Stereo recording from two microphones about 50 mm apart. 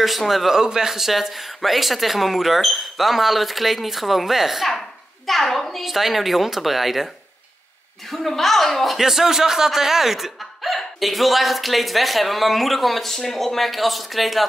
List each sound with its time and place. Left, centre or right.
0.0 s a man's voice: centre
8.1 s a man's voice: centre